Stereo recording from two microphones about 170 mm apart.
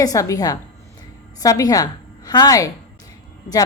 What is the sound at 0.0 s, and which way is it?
A woman's voice, 20° left (ahead or behind).